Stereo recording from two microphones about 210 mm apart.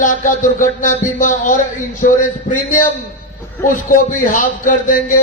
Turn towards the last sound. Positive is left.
turn(degrees=40)  # may be behind; listen again after turning